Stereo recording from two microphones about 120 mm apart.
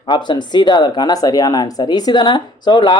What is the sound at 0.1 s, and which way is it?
Speech, 40° left (ahead or behind).